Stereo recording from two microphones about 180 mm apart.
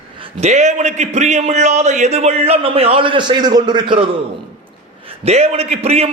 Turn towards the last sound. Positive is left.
turn(degrees=-35)  # may be behind; listen again after turning